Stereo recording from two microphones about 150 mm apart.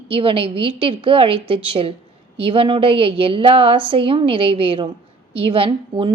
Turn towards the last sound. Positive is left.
turn(degrees=-35)  # may be behind; listen again after turning